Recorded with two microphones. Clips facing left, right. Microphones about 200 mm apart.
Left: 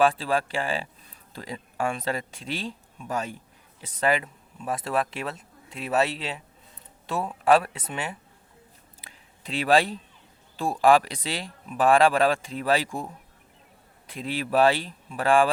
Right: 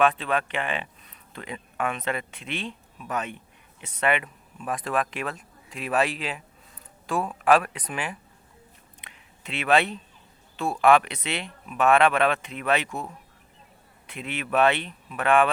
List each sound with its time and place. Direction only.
0.0 s speech: 30° left (ahead or behind)
9.0 s a sound: 35° left (ahead or behind)
10.6 s speech: 35° left (ahead or behind)